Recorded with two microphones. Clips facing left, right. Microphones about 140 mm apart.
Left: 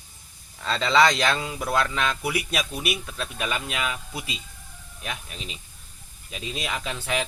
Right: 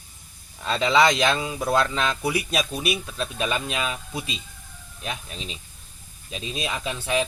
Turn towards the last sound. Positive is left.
turn(degrees=-25)  # may be behind; listen again after turning